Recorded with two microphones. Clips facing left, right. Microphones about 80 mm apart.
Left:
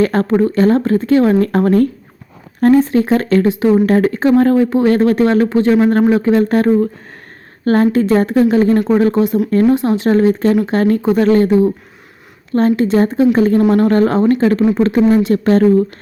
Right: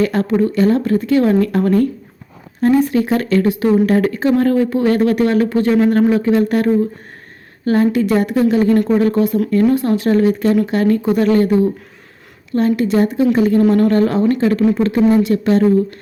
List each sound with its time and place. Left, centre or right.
0.0 s speech: left
2.8 s speech: left
7.6 s a woman's voice: left
8.0 s speech: left
9.5 s speech: left
9.7 s speech: left
12.5 s speech: left
15.2 s speech: left